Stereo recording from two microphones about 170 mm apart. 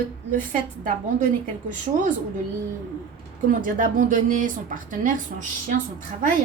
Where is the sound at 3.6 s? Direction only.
55° right (ahead or behind).